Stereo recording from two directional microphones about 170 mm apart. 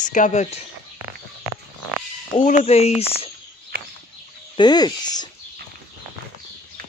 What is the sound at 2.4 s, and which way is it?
Speech, 40° left (ahead or behind).